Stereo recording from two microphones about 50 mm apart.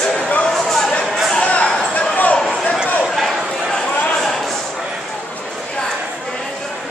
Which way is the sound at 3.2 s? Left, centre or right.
Centre.